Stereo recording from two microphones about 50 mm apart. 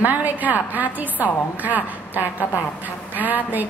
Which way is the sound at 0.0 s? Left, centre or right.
Right.